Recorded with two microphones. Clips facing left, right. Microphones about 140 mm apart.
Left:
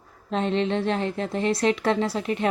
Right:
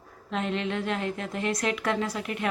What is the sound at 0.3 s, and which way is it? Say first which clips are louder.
A woman's voice: left 5 dB; 30° left (ahead or behind).